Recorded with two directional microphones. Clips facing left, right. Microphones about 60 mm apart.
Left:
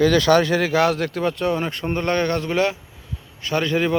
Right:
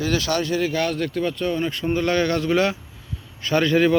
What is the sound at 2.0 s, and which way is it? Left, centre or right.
A man's voice, left.